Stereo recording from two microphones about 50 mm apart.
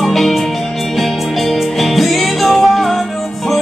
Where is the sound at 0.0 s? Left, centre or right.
Centre.